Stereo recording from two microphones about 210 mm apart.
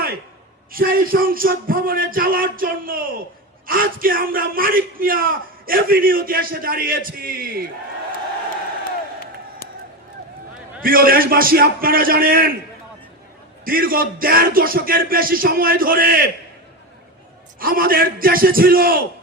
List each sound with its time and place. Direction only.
0.7 s a man's voice: 45° right (ahead or behind)
10.8 s a man's voice: 45° right (ahead or behind)
13.7 s a man's voice: 45° right (ahead or behind)
17.6 s a man's voice: 45° right (ahead or behind)